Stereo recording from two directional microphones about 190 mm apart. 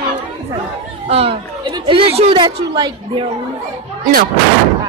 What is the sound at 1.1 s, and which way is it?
A woman's voice, 30° right (ahead or behind).